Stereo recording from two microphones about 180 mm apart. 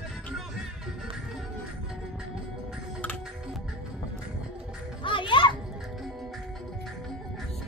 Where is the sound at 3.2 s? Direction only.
5° right (ahead or behind).